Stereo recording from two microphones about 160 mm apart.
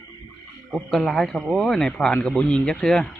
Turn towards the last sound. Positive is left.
turn(degrees=5)  # may be behind; listen again after turning